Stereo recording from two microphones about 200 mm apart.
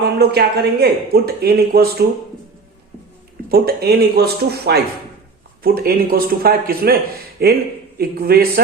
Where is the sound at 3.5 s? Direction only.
50° right (ahead or behind).